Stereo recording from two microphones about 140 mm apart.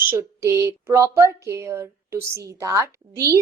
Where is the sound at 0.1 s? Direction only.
20° right (ahead or behind).